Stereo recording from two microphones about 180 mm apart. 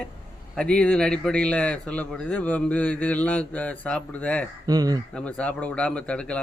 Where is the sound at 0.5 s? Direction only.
5° left (ahead or behind).